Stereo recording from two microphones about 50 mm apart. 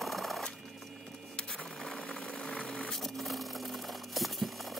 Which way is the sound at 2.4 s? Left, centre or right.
Left.